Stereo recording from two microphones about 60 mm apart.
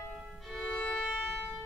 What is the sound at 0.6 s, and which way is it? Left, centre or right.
Music, centre.